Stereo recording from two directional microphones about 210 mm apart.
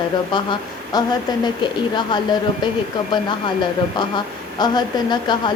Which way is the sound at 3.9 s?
20° left (ahead or behind).